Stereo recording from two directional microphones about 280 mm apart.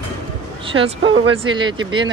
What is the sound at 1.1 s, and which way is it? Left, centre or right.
Speech, centre.